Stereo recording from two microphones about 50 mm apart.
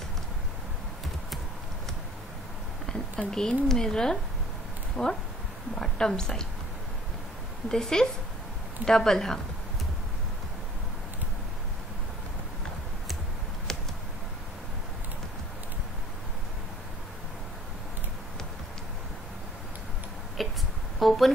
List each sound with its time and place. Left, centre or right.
3.3 s speech: centre
5.0 s speech: left
5.8 s speech: centre
7.7 s speech: centre
13.7 s computer keyboard: centre
20.4 s a sound: centre